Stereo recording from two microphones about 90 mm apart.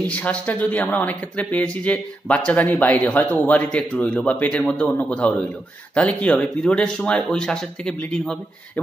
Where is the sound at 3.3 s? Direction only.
20° left (ahead or behind).